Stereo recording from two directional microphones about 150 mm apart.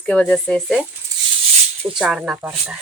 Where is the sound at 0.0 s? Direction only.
5° left (ahead or behind).